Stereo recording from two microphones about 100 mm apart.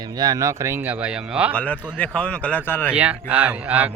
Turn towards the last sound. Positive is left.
turn(degrees=-15)  # may be behind; listen again after turning